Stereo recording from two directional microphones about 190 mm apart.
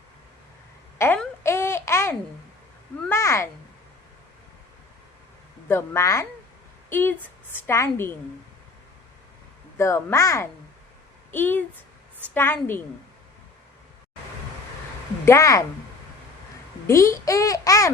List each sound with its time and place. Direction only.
0.9 s a sound: 10° left (ahead or behind)
5.6 s a woman's voice: 10° left (ahead or behind)
9.7 s a woman's voice: 15° left (ahead or behind)
15.2 s speech: 15° left (ahead or behind)
16.8 s a woman's voice: 15° left (ahead or behind)